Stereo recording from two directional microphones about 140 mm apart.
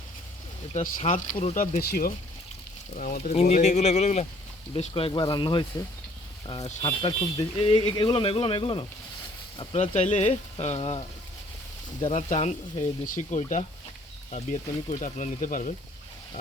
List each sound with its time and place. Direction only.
0.7 s speech: 60° left (ahead or behind); by 2.1 s 90° left
2.9 s speech: 80° left
3.4 s speech: 55° left (ahead or behind)
4.7 s speech: 40° left (ahead or behind)
6.8 s speech: 35° left (ahead or behind)
12.1 s speech: 60° left (ahead or behind)